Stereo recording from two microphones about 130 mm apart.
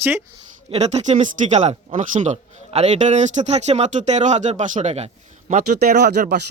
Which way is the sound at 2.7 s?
55° right (ahead or behind).